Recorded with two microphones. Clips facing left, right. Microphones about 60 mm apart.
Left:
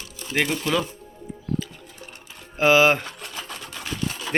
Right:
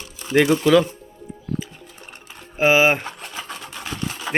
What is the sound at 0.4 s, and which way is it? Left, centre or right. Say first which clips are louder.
Speech: right 9 dB; right.